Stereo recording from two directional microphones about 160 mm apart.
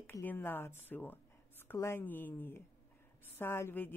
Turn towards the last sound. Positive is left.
turn(degrees=15)  # may be behind; listen again after turning